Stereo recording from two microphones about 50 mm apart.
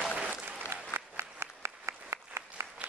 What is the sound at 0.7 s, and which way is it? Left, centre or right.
Applause, right.